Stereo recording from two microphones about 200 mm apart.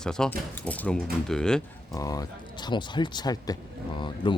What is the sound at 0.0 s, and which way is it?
Speech, 5° left (ahead or behind).